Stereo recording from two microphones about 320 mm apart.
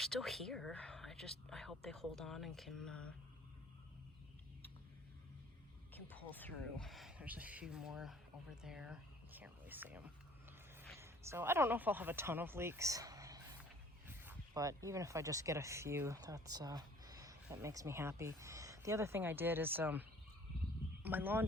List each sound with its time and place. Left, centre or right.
0.0 s speech: centre
5.9 s speech: centre